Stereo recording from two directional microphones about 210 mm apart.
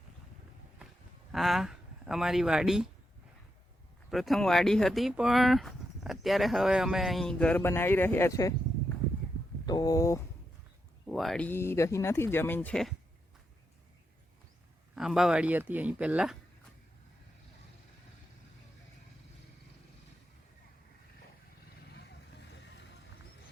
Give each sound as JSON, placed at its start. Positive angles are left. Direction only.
{"t": 1.3, "sound": "speech", "side_deg": 0}
{"t": 4.1, "sound": "speech", "side_deg": 0}
{"t": 9.6, "sound": "speech", "side_deg": 20}
{"t": 11.0, "sound": "speech", "side_deg": 0}
{"t": 14.9, "sound": "speech", "side_deg": 0}
{"t": 21.9, "sound": "vehicle", "side_deg": 55}